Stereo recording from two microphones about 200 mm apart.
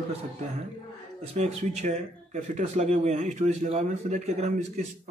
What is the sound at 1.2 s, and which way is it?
Speech, 30° right (ahead or behind).